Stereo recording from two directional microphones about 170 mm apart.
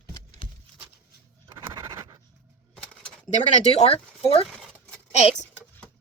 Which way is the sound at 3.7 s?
35° left (ahead or behind).